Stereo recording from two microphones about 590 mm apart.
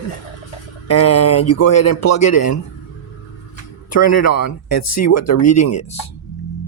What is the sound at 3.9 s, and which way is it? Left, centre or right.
Speech, left.